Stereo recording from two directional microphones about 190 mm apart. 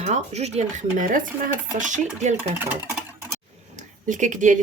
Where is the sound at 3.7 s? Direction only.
40° right (ahead or behind).